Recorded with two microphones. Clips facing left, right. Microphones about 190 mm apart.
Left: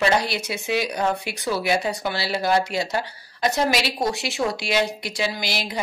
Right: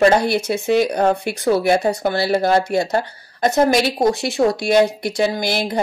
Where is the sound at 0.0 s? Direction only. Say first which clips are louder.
Right 7 dB; 50° right (ahead or behind).